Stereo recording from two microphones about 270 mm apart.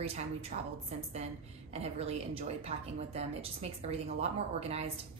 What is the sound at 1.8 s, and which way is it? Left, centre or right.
Speech, right.